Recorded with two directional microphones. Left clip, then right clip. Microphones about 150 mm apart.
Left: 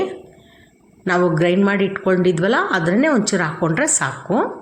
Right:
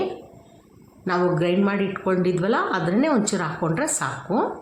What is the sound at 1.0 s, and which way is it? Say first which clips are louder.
Speech: left 5 dB; 20° left (ahead or behind).